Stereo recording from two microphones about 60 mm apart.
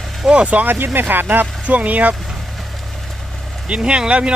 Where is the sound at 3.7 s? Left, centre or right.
Centre.